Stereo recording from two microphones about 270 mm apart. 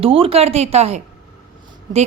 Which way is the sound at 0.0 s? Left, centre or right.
Right.